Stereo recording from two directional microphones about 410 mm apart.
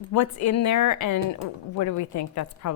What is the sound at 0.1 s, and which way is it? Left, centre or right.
A woman's voice, left.